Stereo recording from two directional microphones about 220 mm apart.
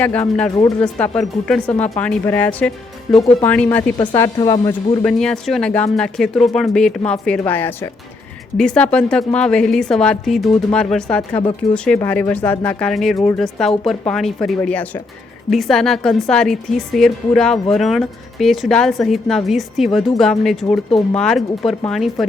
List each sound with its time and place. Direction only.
0.0 s a woman's voice: 5° left (ahead or behind)
5.0 s a woman's voice: 5° left (ahead or behind)